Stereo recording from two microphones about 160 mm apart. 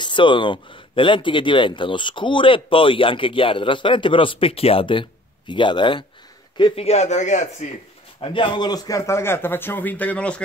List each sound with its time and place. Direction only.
0.0 s a man's voice: 30° left (ahead or behind); by 7.7 s 50° left (ahead or behind)
8.2 s a man's voice: 30° left (ahead or behind); by 10.4 s 5° left (ahead or behind)